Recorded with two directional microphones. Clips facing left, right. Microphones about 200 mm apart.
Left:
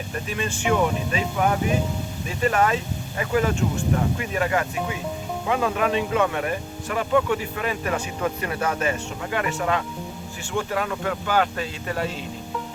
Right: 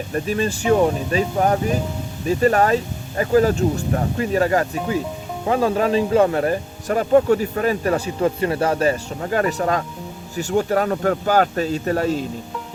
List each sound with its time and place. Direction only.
0.1 s speech: 40° right (ahead or behind)